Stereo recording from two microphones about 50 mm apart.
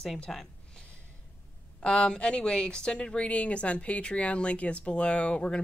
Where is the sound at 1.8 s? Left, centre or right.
Centre.